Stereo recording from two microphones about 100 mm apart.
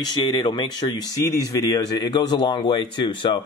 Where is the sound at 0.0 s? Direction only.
45° left (ahead or behind).